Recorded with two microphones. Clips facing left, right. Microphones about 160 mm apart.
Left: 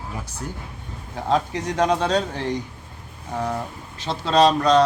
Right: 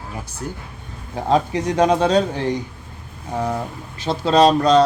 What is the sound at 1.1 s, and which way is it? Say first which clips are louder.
A man's voice: right 4 dB; 10° right (ahead or behind).